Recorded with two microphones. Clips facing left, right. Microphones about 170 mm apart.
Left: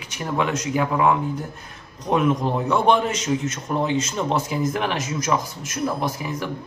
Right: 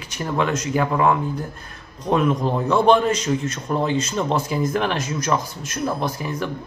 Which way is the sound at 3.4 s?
20° left (ahead or behind).